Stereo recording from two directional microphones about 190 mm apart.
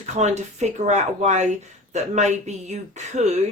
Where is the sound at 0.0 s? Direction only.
35° right (ahead or behind).